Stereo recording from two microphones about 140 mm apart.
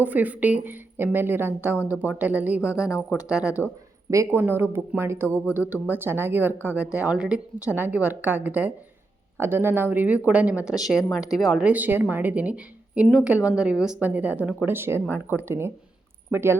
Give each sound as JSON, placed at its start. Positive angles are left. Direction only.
{"t": 0.0, "sound": "a woman's voice", "side_deg": -10}
{"t": 4.1, "sound": "a woman's voice", "side_deg": -20}
{"t": 11.6, "sound": "a woman's voice", "side_deg": -10}